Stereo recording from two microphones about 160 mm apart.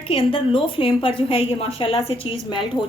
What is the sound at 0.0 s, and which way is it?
A woman's voice, 35° left (ahead or behind).